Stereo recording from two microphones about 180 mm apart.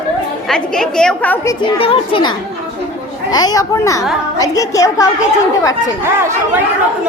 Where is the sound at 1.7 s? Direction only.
30° left (ahead or behind).